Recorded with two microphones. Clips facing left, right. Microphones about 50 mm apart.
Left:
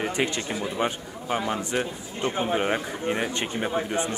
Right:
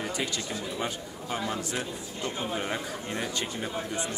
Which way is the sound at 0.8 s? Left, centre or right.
Left.